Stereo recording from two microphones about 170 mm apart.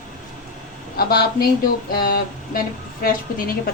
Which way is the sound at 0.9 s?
65° left (ahead or behind).